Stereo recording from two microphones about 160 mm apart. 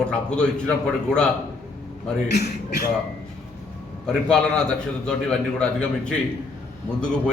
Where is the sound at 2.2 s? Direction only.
90° left.